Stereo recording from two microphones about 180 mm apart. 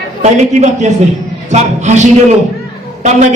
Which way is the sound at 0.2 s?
40° right (ahead or behind).